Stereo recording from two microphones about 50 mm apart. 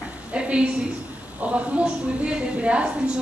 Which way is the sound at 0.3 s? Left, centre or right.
Right.